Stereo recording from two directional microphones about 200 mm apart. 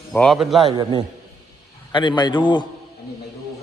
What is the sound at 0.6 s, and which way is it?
Speech, 20° right (ahead or behind).